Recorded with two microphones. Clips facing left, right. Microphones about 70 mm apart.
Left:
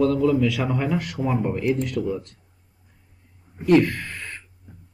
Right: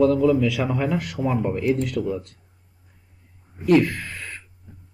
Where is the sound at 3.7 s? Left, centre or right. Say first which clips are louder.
Even; centre.